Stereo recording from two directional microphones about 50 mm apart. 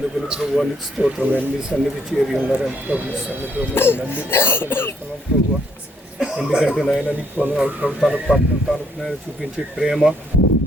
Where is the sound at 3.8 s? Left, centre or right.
Left.